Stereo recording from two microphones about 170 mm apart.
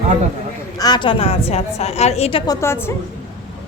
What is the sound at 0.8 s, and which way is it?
A woman's voice, 25° left (ahead or behind).